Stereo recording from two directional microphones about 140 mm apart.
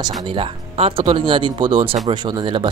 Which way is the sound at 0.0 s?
35° right (ahead or behind).